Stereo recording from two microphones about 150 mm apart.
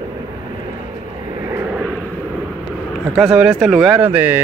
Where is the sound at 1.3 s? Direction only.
25° right (ahead or behind).